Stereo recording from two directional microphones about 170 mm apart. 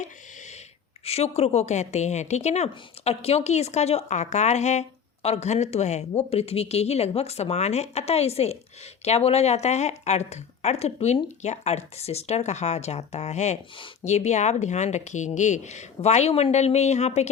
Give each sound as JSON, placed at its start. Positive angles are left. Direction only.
{"t": 1.0, "sound": "a woman's voice", "side_deg": 40}